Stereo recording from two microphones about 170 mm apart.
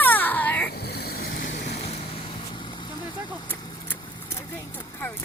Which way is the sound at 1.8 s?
35° left (ahead or behind).